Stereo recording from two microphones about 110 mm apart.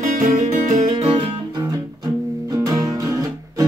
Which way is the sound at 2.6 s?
35° right (ahead or behind).